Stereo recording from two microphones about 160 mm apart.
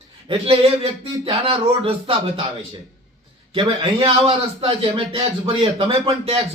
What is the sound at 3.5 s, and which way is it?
A man's voice, 30° right (ahead or behind).